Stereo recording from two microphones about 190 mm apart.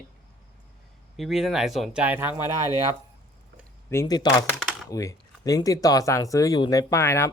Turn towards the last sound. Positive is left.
turn(degrees=15)  # may be behind; listen again after turning